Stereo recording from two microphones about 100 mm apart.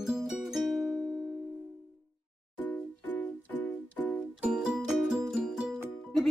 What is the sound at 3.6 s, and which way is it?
Music, 15° left (ahead or behind).